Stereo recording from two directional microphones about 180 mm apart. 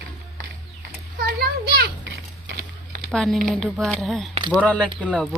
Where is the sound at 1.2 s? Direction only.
60° right (ahead or behind).